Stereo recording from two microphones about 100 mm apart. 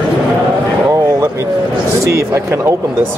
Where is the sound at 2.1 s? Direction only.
30° right (ahead or behind).